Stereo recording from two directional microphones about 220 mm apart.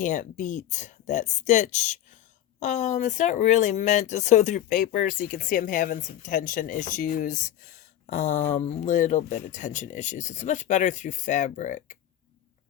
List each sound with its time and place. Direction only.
0.0 s speech: 35° left (ahead or behind)